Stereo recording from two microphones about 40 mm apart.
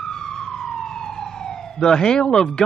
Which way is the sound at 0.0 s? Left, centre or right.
Centre.